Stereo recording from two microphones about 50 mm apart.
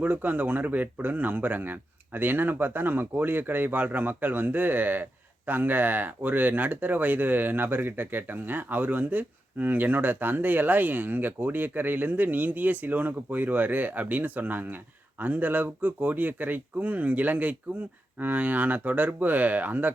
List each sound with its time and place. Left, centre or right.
0.0 s speech: right